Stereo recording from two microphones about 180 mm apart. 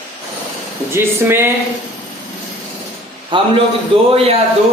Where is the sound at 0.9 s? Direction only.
15° right (ahead or behind).